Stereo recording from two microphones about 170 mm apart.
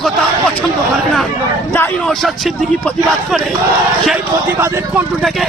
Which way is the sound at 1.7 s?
10° left (ahead or behind).